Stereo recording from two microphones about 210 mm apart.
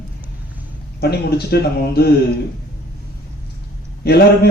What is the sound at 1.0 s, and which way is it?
A man's voice, 50° left (ahead or behind).